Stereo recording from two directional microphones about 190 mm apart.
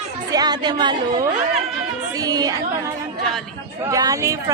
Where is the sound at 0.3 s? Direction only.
20° right (ahead or behind).